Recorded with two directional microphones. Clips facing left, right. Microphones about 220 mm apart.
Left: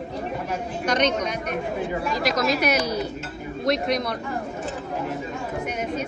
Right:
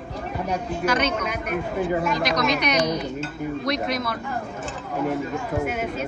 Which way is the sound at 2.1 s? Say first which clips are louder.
Even; centre (ahead or behind).